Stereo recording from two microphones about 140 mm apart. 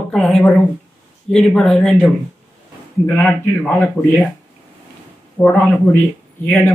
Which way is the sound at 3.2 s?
10° left (ahead or behind).